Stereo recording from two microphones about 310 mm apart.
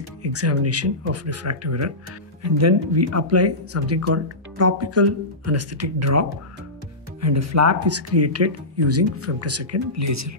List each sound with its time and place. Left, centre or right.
0.2 s speech: right